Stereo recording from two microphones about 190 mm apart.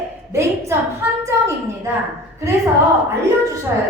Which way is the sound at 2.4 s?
15° right (ahead or behind).